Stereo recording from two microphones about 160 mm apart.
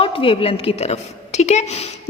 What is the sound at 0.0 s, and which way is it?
A woman's voice, 35° left (ahead or behind).